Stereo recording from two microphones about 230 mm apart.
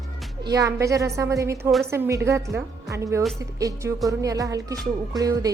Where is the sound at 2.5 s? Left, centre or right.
Centre.